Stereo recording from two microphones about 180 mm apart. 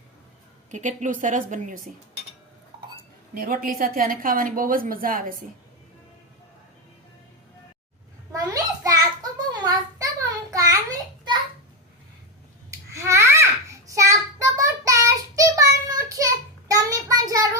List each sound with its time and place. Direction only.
0.7 s a woman's voice: 45° right (ahead or behind)
3.3 s a woman's voice: 55° right (ahead or behind)
8.3 s a sound: 20° right (ahead or behind)
12.7 s babbling: 15° right (ahead or behind)